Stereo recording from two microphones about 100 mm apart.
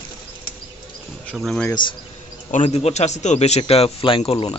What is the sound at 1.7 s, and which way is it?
Speech, 50° left (ahead or behind).